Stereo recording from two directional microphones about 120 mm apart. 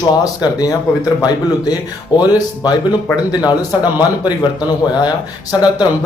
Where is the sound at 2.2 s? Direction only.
35° left (ahead or behind).